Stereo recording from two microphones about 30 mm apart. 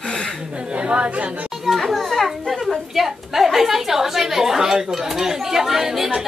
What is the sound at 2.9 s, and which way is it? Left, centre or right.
A woman's voice, centre.